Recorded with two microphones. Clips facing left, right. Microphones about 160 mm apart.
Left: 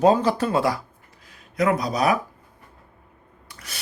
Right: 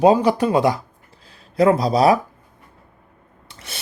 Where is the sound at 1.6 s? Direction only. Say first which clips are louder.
Right 6 dB; 30° right (ahead or behind).